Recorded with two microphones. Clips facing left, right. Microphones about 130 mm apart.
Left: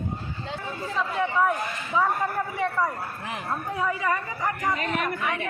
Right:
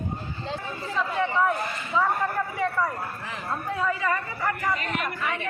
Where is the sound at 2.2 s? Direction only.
15° left (ahead or behind).